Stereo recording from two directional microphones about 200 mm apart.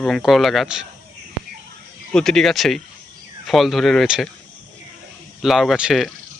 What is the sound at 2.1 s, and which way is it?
Speech, 5° left (ahead or behind).